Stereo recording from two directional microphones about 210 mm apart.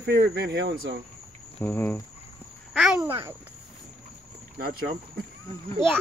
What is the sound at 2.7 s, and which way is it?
Speech, centre (ahead or behind).